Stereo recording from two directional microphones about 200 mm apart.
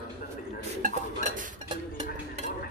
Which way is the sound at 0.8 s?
35° right (ahead or behind).